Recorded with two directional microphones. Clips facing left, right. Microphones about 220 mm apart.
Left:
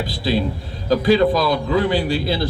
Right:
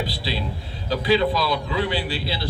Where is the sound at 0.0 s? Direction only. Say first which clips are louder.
Left 7 dB; 45° left (ahead or behind).